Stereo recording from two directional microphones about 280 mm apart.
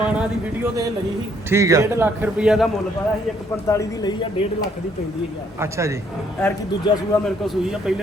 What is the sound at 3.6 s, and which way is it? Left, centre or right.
Speech, centre.